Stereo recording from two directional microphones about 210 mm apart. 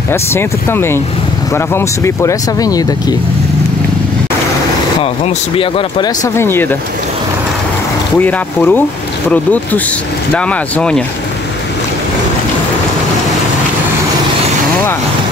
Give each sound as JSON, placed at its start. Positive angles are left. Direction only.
{"t": 0.1, "sound": "speech", "side_deg": 10}
{"t": 5.0, "sound": "speech", "side_deg": 25}
{"t": 8.2, "sound": "speech", "side_deg": 10}